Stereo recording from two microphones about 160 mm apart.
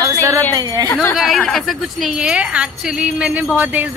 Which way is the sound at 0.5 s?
25° right (ahead or behind).